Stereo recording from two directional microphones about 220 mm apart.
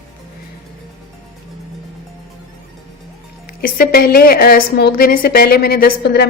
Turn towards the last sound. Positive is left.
turn(degrees=45)  # may be behind; listen again after turning